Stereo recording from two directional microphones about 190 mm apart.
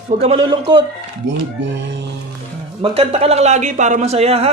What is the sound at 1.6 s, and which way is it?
Music, 70° right (ahead or behind).